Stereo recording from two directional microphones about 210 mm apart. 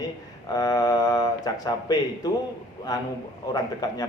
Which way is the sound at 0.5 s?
20° left (ahead or behind).